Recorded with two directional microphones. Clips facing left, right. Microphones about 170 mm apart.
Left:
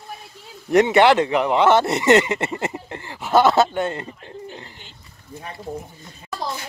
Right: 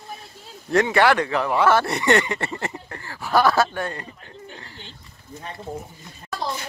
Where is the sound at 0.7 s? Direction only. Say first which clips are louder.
Left 4 dB; 20° left (ahead or behind).